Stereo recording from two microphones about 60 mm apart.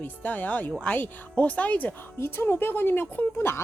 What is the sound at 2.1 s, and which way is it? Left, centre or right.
Speech, left.